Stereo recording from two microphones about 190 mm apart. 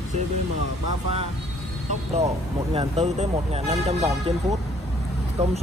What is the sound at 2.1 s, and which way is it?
Speech, 35° right (ahead or behind).